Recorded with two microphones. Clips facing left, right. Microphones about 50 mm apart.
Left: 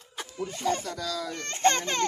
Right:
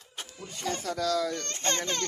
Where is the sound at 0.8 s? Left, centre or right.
Right.